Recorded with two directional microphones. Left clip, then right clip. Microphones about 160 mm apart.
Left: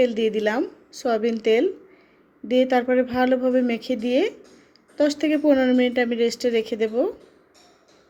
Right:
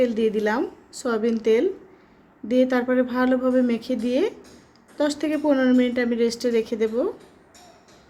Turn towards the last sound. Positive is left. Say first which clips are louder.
# left 1 dB
turn(degrees=15)  # may be behind; listen again after turning